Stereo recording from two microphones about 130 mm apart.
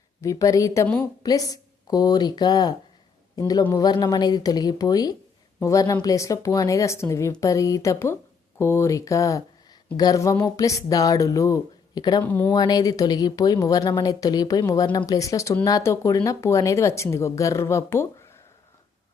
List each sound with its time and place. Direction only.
0.2 s a woman's voice: 25° left (ahead or behind)
12.2 s speech: 15° left (ahead or behind)
12.5 s a woman's voice: 30° left (ahead or behind)